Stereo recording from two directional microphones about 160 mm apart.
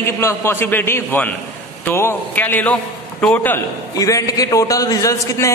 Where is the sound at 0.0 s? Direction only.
15° left (ahead or behind).